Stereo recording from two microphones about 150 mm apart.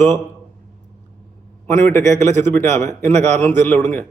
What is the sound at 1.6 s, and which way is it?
Speech, 15° left (ahead or behind).